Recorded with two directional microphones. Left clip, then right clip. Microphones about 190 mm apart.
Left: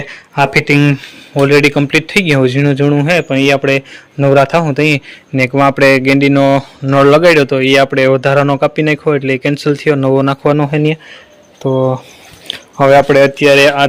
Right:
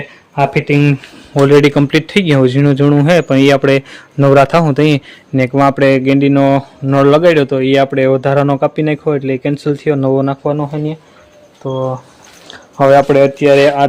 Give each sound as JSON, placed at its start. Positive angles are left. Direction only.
{"t": 0.1, "sound": "speech", "side_deg": 5}
{"t": 1.3, "sound": "a man's voice", "side_deg": -15}
{"t": 5.5, "sound": "speech", "side_deg": 0}
{"t": 10.4, "sound": "speech", "side_deg": 25}
{"t": 12.7, "sound": "speech", "side_deg": 5}